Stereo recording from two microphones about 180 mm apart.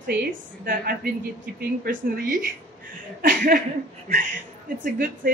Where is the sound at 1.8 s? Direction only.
50° right (ahead or behind).